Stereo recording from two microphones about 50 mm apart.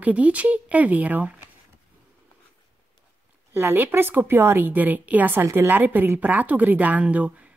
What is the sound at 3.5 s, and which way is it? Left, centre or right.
A woman's voice, right.